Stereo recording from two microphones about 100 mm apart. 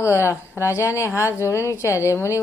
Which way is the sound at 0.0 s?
30° left (ahead or behind).